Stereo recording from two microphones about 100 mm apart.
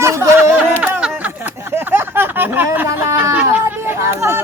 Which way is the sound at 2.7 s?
20° right (ahead or behind).